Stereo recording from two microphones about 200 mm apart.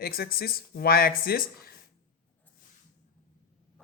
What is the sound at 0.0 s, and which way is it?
Speech, 50° left (ahead or behind).